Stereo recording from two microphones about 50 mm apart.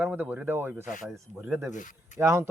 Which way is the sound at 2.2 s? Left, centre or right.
Right.